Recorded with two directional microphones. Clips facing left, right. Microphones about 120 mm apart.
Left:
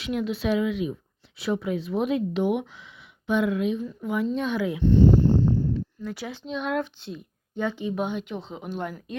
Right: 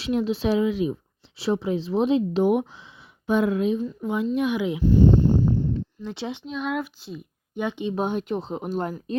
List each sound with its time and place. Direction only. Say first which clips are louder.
0.0 s speech: right 3 dB; 30° right (ahead or behind)
2.4 s speech: right 4 dB; 40° right (ahead or behind)
3.8 s speech: right 1 dB; 20° right (ahead or behind)
5.0 s a sound: even; 20° right (ahead or behind)
6.0 s speech: right 2 dB; 25° right (ahead or behind)
6.4 s speech: left 2 dB; centre (ahead or behind)
7.5 s speech: right 1 dB; 20° right (ahead or behind)
7.9 s speech: right 4 dB; 45° right (ahead or behind)